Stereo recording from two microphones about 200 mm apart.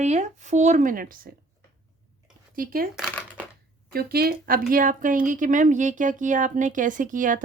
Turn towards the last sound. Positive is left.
turn(degrees=-40)  # may be behind; listen again after turning